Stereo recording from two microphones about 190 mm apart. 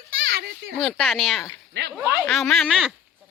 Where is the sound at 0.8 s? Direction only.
Centre (ahead or behind).